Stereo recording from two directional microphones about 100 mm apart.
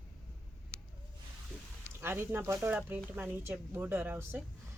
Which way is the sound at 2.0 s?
25° right (ahead or behind).